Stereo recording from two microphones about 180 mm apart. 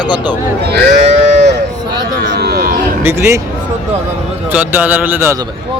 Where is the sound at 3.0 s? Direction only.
15° right (ahead or behind).